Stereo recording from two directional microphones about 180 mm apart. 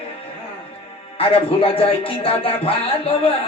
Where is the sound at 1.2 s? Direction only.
30° left (ahead or behind).